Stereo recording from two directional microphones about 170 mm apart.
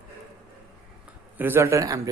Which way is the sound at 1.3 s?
10° right (ahead or behind).